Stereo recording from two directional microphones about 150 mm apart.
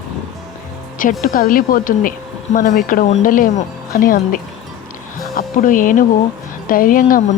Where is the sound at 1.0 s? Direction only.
60° left (ahead or behind).